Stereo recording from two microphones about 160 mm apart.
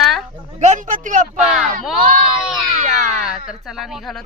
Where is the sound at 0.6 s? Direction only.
50° right (ahead or behind).